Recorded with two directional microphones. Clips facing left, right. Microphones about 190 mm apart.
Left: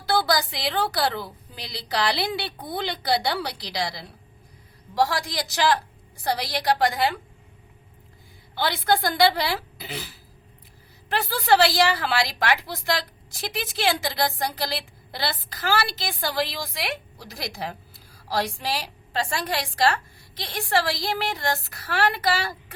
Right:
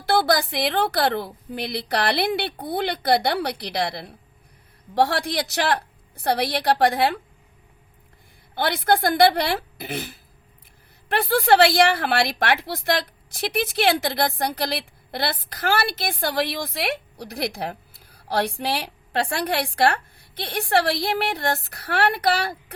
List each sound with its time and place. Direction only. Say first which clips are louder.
0.3 s a woman's voice: right 4 dB; 55° right (ahead or behind)
8.5 s a woman's voice: right 2 dB; 55° right (ahead or behind)